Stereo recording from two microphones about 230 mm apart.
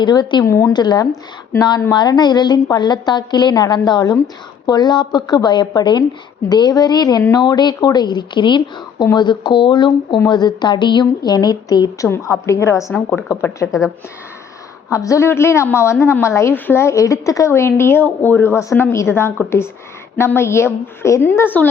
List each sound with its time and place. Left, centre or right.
0.0 s a woman's voice: centre
14.8 s a woman's voice: centre